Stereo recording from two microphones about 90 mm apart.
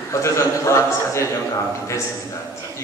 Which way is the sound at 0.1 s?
30° left (ahead or behind).